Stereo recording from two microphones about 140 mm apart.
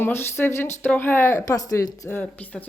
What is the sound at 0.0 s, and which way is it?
Speech, 15° left (ahead or behind).